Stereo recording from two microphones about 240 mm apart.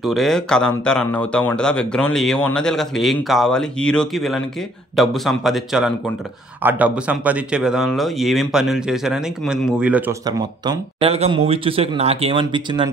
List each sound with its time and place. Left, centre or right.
0.0 s speech: centre
10.2 s speech: centre